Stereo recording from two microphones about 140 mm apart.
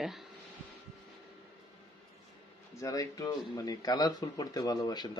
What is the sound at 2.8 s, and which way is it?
Speech, 25° left (ahead or behind).